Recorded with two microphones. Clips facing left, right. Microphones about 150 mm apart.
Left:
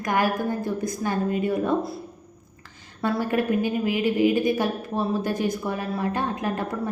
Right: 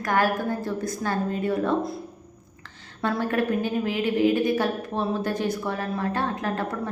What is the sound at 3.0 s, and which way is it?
A woman's voice, 10° left (ahead or behind).